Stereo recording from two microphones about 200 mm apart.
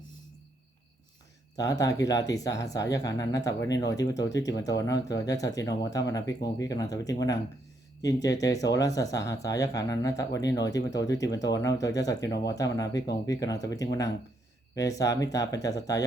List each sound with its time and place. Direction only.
1.5 s speech: 15° left (ahead or behind)